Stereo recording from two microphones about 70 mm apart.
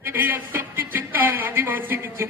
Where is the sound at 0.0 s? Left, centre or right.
Right.